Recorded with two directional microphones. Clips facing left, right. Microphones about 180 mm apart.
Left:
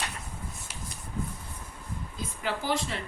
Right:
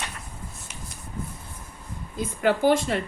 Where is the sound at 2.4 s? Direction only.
55° right (ahead or behind).